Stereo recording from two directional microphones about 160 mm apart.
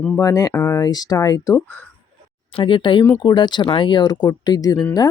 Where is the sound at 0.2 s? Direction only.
20° left (ahead or behind).